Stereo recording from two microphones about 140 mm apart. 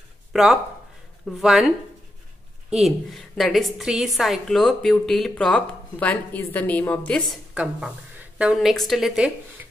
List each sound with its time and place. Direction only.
0.3 s a woman's voice: 5° right (ahead or behind)
2.7 s a woman's voice: centre (ahead or behind)
7.5 s a woman's voice: 5° right (ahead or behind)